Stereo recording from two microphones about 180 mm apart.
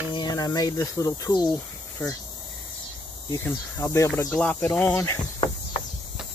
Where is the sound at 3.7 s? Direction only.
15° left (ahead or behind).